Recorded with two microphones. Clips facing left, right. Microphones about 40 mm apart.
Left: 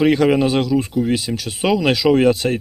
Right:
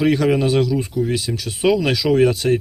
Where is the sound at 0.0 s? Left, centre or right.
Left.